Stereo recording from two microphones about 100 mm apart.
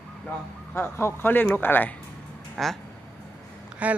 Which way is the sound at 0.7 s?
25° left (ahead or behind).